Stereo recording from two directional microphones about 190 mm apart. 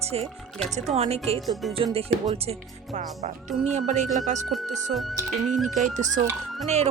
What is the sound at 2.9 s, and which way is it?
Speech, 40° right (ahead or behind).